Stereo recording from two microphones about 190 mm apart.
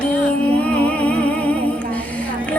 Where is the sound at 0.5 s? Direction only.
5° left (ahead or behind).